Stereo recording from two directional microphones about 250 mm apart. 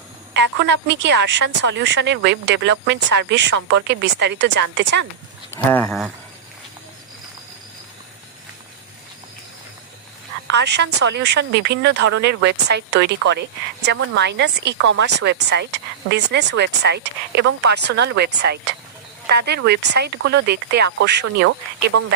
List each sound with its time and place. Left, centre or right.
0.3 s a woman's voice: right
5.7 s speech: centre
10.5 s a woman's voice: right
21.8 s speech: right